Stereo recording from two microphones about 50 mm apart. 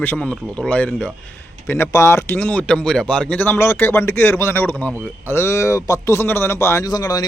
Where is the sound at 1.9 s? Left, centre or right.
Left.